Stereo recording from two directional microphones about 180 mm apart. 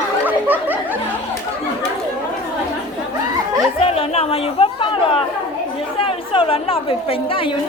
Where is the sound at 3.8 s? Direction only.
35° left (ahead or behind).